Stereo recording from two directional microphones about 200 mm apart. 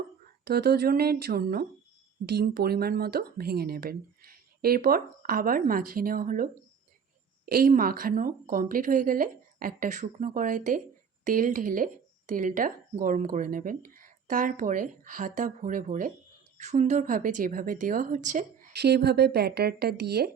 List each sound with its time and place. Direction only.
0.4 s speech: 50° right (ahead or behind)
18.7 s speech: 55° right (ahead or behind)